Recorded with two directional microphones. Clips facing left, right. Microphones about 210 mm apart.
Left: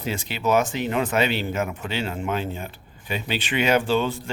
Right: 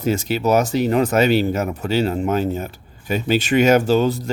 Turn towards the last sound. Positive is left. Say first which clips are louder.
# right 6 dB
turn(degrees=-40)  # may be behind; listen again after turning